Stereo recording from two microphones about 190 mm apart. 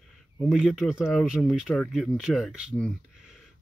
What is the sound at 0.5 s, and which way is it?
Speech, centre (ahead or behind).